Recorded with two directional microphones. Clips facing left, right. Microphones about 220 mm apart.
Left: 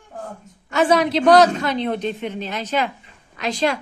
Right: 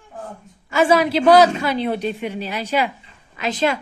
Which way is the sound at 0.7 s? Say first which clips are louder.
Right 1 dB; 5° right (ahead or behind).